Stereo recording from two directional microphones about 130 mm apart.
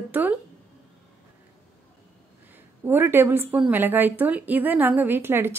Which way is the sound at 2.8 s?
15° right (ahead or behind).